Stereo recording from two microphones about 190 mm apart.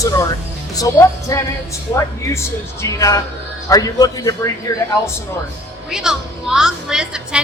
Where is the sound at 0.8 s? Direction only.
15° left (ahead or behind).